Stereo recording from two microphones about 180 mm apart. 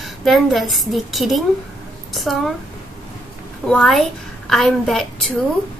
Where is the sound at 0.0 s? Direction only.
Centre (ahead or behind).